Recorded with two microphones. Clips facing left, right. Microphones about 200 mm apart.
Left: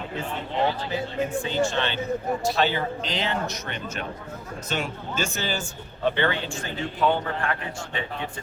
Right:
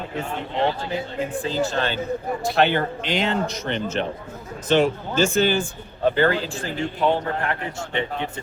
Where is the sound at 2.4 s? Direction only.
55° right (ahead or behind).